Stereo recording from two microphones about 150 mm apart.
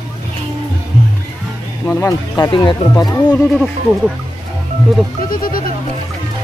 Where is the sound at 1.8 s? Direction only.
20° left (ahead or behind).